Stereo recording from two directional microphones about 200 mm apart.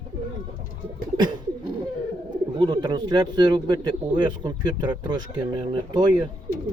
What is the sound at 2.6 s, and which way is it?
Speech, 20° right (ahead or behind).